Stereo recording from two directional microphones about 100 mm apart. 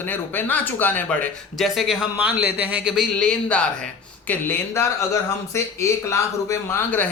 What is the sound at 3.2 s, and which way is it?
Speech, 10° left (ahead or behind).